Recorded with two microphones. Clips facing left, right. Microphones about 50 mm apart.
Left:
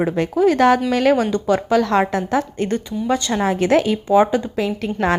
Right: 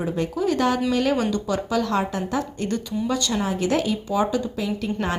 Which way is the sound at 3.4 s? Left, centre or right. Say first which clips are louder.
Left 9 dB; left.